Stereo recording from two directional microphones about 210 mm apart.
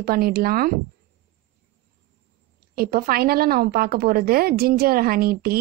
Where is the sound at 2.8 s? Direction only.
45° right (ahead or behind).